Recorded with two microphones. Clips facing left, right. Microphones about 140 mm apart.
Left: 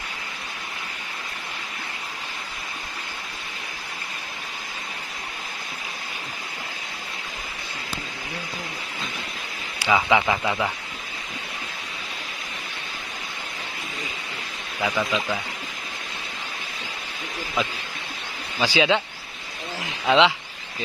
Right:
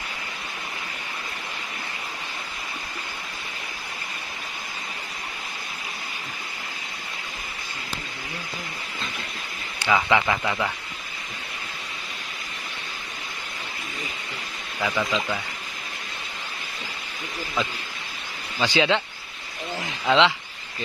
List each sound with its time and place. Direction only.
9.8 s speech: 10° left (ahead or behind)
14.9 s speech: centre (ahead or behind)
18.6 s speech: 10° left (ahead or behind)
20.1 s speech: 15° left (ahead or behind)